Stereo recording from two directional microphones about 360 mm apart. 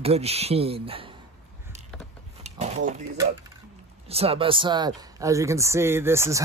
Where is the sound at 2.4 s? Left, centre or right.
Centre.